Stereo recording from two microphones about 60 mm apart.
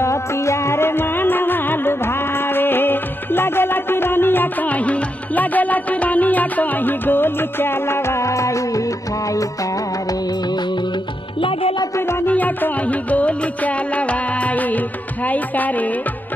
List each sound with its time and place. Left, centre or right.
0.0 s music: left
12.3 s music: left